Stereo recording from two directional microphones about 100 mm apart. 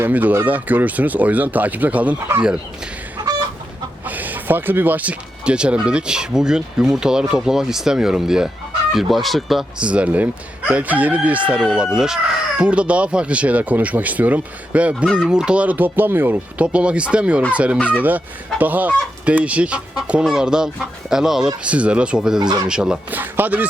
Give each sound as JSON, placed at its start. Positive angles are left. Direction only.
{"t": 0.0, "sound": "speech", "side_deg": -15}
{"t": 4.0, "sound": "speech", "side_deg": -15}
{"t": 22.4, "sound": "speech", "side_deg": -45}
{"t": 22.7, "sound": "speech", "side_deg": -5}
{"t": 23.1, "sound": "speech", "side_deg": -20}